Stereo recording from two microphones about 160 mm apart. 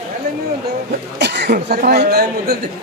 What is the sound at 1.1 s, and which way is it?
Speech, 90° right.